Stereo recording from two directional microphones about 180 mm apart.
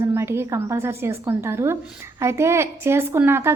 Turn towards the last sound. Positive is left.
turn(degrees=-10)  # may be behind; listen again after turning